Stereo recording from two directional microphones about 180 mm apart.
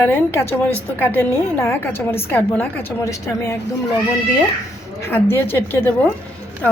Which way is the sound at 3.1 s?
15° left (ahead or behind).